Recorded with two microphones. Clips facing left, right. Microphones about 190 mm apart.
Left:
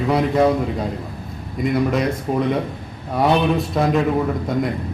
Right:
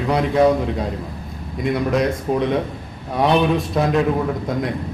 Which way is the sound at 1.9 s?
Centre (ahead or behind).